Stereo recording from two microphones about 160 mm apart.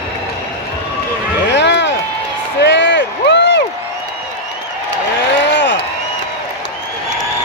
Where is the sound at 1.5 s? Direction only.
90° left.